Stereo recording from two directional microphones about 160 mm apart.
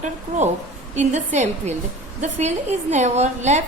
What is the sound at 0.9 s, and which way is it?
A woman's voice, 45° right (ahead or behind).